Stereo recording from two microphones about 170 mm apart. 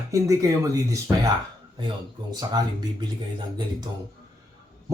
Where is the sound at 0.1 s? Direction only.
20° right (ahead or behind).